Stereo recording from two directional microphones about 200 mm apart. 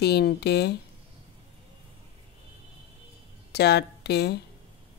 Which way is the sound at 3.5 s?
55° left (ahead or behind).